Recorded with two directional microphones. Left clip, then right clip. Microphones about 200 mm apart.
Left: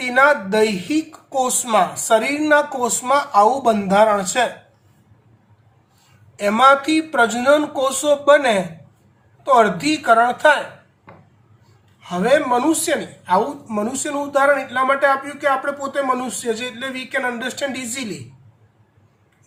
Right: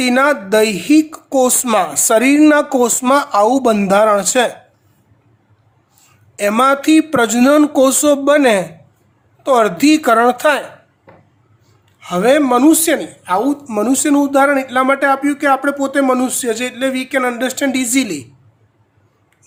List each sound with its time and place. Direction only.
0.0 s a woman's voice: 65° right (ahead or behind)
6.3 s a woman's voice: 60° right (ahead or behind)
11.9 s a woman's voice: 60° right (ahead or behind)